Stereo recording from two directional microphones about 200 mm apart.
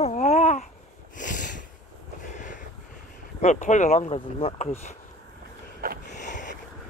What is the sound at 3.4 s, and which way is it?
Speech, 35° left (ahead or behind).